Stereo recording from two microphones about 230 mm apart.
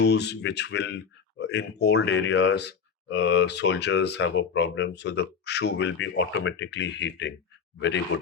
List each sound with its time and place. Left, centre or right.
0.0 s speech: left